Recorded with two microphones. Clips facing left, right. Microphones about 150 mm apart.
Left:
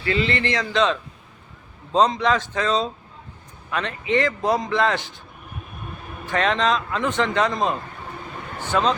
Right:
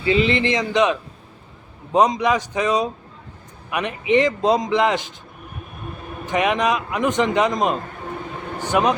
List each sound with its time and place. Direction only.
0.0 s a man's voice: 20° right (ahead or behind)
6.2 s a man's voice: 15° right (ahead or behind)